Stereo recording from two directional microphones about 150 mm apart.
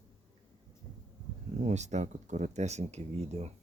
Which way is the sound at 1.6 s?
50° right (ahead or behind).